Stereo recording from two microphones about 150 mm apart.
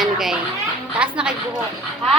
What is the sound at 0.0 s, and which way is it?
Children playing, centre (ahead or behind).